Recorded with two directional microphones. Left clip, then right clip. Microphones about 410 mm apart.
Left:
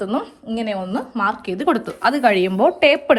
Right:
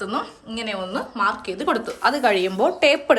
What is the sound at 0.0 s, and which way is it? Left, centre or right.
A woman's voice, centre.